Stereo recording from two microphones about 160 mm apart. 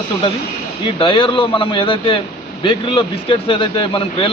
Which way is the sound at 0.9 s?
35° left (ahead or behind).